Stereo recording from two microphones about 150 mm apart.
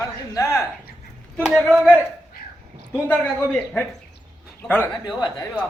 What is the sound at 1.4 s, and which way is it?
Speech, 5° right (ahead or behind).